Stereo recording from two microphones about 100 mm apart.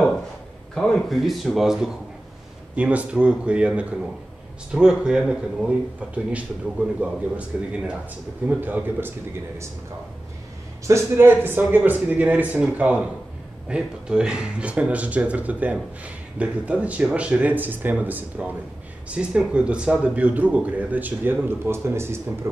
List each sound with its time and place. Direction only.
1.1 s speech: centre (ahead or behind)
8.5 s speech: 15° right (ahead or behind)
10.9 s speech: 25° right (ahead or behind)